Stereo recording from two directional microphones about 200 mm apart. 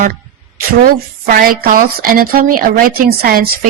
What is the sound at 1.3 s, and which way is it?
A woman's voice, 45° right (ahead or behind).